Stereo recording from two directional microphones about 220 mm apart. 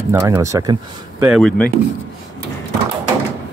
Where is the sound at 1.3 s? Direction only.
5° left (ahead or behind).